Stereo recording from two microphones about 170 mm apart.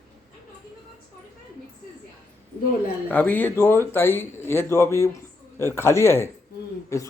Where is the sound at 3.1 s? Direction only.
10° left (ahead or behind).